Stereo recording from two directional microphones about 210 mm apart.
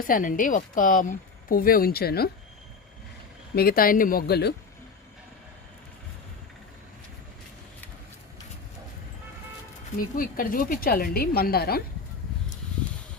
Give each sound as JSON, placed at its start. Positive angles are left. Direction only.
{"t": 0.0, "sound": "speech", "side_deg": 40}
{"t": 3.5, "sound": "speech", "side_deg": 45}
{"t": 10.0, "sound": "speech", "side_deg": 40}